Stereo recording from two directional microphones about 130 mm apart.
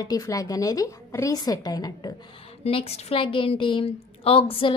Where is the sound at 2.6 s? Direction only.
50° left (ahead or behind).